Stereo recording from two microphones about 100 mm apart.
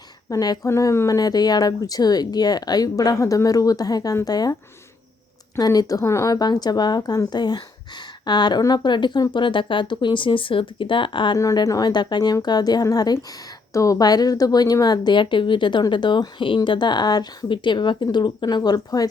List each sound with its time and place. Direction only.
0.3 s speech: 40° left (ahead or behind)
0.7 s speech: 30° left (ahead or behind)
5.5 s speech: 40° left (ahead or behind); by 11.3 s 55° left (ahead or behind)
11.3 s speech: 35° left (ahead or behind)